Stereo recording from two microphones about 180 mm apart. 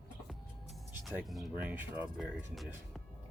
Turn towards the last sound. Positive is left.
turn(degrees=0)  # may be behind; listen again after turning